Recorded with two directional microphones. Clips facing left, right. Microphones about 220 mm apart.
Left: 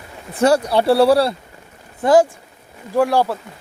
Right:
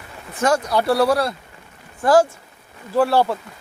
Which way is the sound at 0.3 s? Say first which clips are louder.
Left 4 dB; 35° left (ahead or behind).